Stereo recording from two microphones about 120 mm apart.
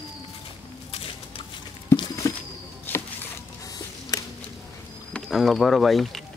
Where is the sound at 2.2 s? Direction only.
25° left (ahead or behind).